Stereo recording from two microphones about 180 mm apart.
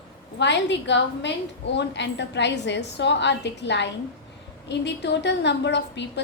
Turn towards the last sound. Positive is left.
turn(degrees=70)  # may be behind; listen again after turning